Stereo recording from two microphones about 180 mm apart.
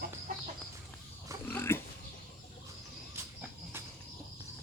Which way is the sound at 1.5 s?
10° left (ahead or behind).